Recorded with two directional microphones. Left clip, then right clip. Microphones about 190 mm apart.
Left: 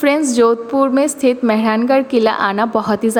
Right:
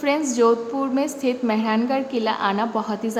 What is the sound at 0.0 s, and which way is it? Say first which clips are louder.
A woman's voice: left 6 dB; 30° left (ahead or behind).